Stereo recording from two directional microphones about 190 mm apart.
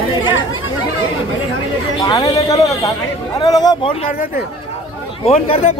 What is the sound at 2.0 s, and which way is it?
Speech, 25° left (ahead or behind).